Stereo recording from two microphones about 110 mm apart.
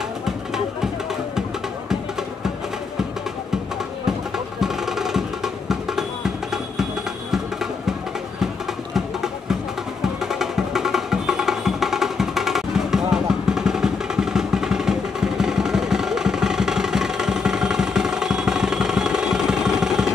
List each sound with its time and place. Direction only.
4.6 s music: 5° right (ahead or behind)
8.9 s a sound: 5° right (ahead or behind)
10.2 s music: 5° right (ahead or behind)